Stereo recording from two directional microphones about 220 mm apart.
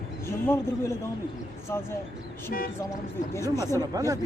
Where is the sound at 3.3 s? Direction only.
10° left (ahead or behind).